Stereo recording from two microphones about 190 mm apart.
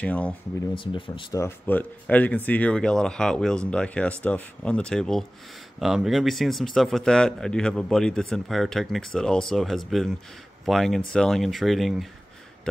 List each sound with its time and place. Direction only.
0.0 s speech: 5° left (ahead or behind)
0.7 s speech: 25° left (ahead or behind)
1.4 s speech: 10° left (ahead or behind)